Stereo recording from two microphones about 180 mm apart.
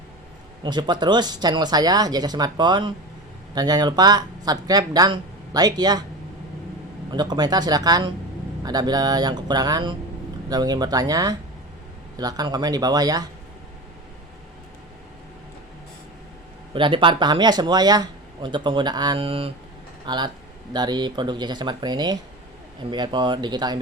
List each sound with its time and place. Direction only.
0.6 s speech: 25° right (ahead or behind)
7.1 s speech: 25° right (ahead or behind)
16.7 s speech: 30° right (ahead or behind)